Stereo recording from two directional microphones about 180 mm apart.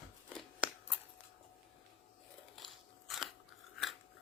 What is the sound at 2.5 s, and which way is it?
Scissors, centre (ahead or behind).